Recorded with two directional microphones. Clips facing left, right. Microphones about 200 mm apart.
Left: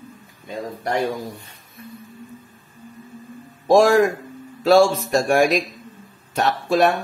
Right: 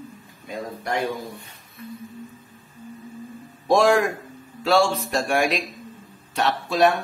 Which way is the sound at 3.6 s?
45° left (ahead or behind).